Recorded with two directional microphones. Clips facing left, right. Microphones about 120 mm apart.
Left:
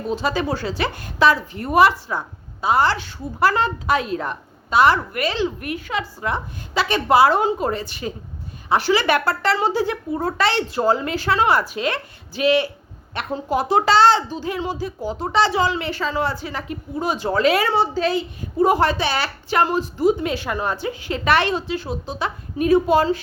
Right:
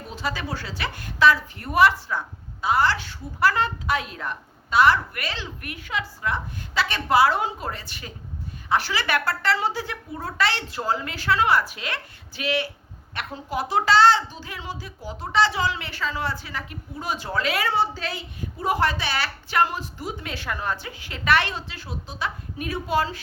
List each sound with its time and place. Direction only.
0.1 s a woman's voice: 25° left (ahead or behind)
5.8 s a woman's voice: 35° left (ahead or behind)
6.2 s a woman's voice: 20° left (ahead or behind)